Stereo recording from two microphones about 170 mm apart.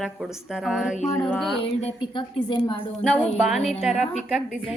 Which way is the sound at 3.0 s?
5° left (ahead or behind).